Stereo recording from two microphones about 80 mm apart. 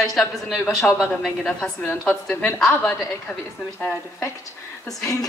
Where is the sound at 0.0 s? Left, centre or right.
Centre.